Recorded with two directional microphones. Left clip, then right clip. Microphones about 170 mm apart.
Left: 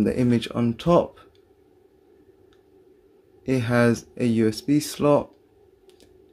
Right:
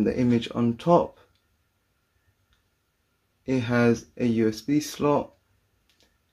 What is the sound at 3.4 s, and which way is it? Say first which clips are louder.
Speech: left 2 dB; 30° left (ahead or behind).